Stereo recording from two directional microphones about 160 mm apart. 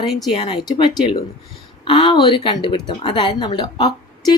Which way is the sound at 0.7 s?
30° left (ahead or behind).